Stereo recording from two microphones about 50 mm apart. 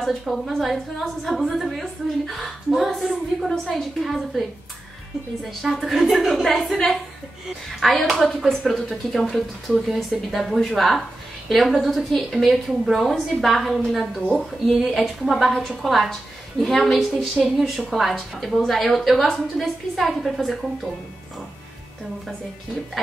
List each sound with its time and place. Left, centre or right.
0.0 s speech: centre
5.6 s speech: centre